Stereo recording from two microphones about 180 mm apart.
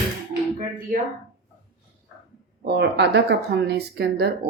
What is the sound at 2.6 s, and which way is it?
Speech, 65° right (ahead or behind).